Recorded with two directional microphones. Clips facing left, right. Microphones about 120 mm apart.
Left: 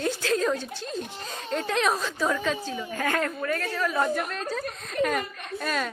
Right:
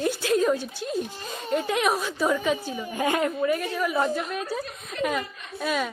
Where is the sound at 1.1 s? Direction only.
5° right (ahead or behind).